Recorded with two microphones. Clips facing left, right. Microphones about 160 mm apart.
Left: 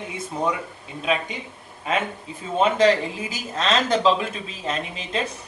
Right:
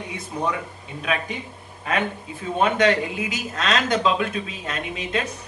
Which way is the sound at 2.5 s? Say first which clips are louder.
Left 1 dB; 25° left (ahead or behind).